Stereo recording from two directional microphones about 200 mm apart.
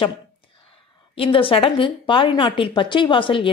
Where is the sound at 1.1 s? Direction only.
25° left (ahead or behind).